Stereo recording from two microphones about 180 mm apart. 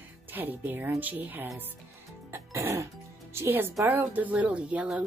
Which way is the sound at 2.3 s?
15° right (ahead or behind).